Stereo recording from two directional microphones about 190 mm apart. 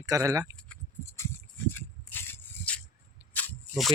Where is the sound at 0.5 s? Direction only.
10° left (ahead or behind).